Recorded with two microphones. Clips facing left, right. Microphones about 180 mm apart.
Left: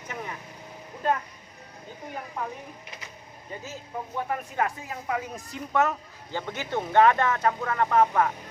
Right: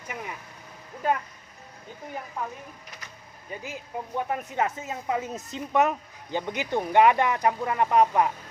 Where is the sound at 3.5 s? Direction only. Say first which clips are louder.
Right 1 dB; 15° right (ahead or behind).